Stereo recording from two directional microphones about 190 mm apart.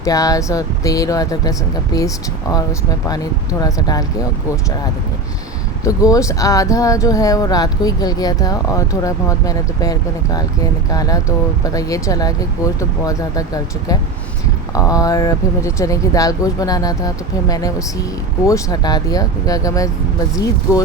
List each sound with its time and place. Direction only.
0.0 s speech: 20° left (ahead or behind)
5.8 s speech: 15° left (ahead or behind)